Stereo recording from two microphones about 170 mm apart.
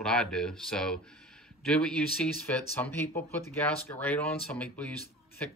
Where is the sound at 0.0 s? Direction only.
5° left (ahead or behind).